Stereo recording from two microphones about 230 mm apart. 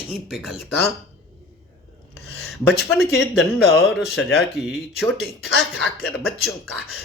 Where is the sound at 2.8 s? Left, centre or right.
Centre.